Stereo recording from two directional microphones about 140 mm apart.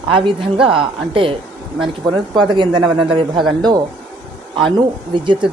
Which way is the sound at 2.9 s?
40° right (ahead or behind).